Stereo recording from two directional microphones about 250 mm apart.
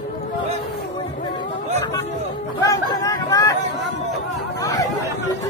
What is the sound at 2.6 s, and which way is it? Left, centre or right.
Chatter, centre.